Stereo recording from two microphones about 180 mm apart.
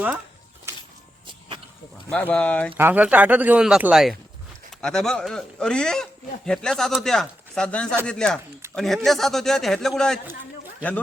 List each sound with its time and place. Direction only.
2.1 s speech: 10° left (ahead or behind)
2.7 s speech: 10° right (ahead or behind)